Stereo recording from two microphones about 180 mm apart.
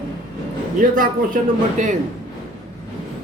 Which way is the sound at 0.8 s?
50° right (ahead or behind).